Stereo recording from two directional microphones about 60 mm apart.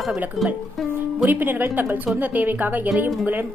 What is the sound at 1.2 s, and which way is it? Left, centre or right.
A woman's voice, right.